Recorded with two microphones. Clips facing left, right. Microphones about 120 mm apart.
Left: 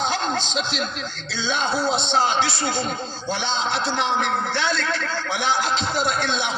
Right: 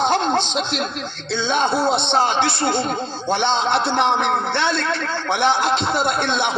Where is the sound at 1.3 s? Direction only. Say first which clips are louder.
Right 5 dB; 55° right (ahead or behind).